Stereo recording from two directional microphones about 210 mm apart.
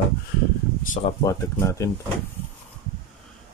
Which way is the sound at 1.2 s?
15° left (ahead or behind).